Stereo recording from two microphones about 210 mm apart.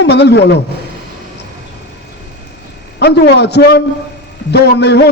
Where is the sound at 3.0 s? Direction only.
55° left (ahead or behind).